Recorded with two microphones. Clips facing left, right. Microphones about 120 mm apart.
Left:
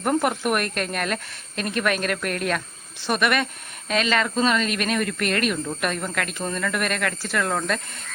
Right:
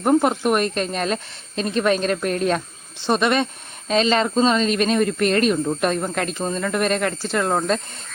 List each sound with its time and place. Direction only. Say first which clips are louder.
0.0 s speech: right 5 dB; 20° right (ahead or behind)